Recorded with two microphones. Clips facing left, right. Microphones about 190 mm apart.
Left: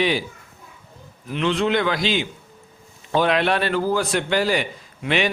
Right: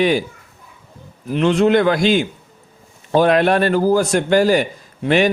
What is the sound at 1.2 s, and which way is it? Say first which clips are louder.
A man's voice: right 7 dB; 45° right (ahead or behind).